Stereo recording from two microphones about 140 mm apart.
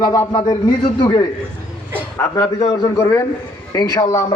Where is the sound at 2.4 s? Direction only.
30° left (ahead or behind).